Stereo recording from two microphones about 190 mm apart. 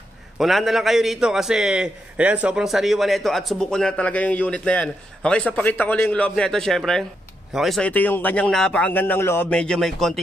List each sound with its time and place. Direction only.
0.4 s a man's voice: centre (ahead or behind)